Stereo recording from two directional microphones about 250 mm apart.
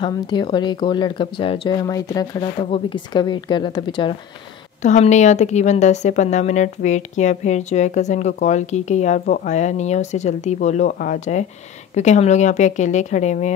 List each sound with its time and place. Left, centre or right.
0.0 s a woman's voice: centre